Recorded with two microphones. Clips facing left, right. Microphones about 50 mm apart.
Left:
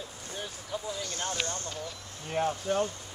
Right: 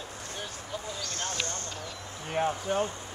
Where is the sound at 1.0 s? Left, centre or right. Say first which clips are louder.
Left 1 dB; centre.